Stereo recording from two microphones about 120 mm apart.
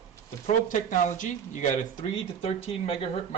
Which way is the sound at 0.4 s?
90° left.